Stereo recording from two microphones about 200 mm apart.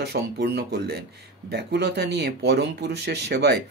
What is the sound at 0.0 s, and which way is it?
Speech, 55° right (ahead or behind).